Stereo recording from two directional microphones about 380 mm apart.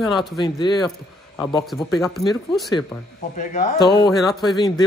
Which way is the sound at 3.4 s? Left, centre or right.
Centre.